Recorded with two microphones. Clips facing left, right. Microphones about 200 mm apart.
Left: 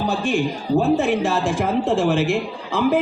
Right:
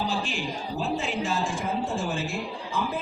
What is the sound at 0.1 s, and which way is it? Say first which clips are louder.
A man's voice: left 9 dB; 55° left (ahead or behind).